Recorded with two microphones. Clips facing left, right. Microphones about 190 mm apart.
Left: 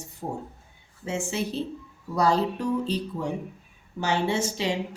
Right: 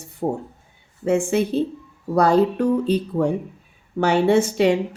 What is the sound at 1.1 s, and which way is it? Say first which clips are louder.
Speech: right 10 dB; 55° right (ahead or behind).